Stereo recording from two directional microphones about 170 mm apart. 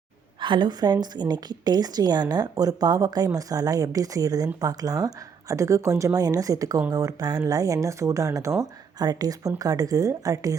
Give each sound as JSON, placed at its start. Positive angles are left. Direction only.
{"t": 0.3, "sound": "speech", "side_deg": -30}